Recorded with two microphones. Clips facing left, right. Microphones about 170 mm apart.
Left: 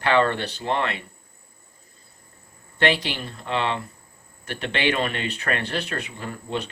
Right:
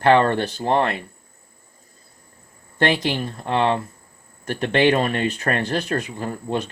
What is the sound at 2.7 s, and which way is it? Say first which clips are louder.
Speech: right 3 dB; 45° right (ahead or behind).